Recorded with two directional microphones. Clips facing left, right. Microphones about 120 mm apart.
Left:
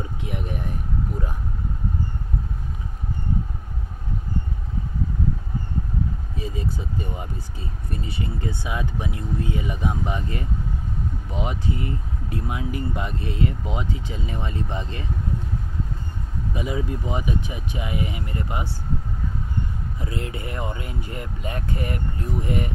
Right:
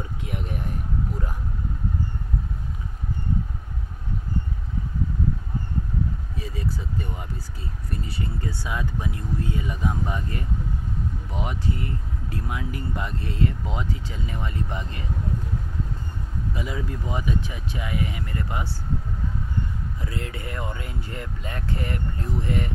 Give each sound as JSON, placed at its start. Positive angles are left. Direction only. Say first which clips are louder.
{"t": 0.2, "sound": "speech", "louder": "left 1 dB", "side_deg": 20}
{"t": 6.3, "sound": "speech", "louder": "left 2 dB", "side_deg": 20}
{"t": 16.5, "sound": "speech", "louder": "left 6 dB", "side_deg": 20}
{"t": 20.0, "sound": "speech", "louder": "left 4 dB", "side_deg": 20}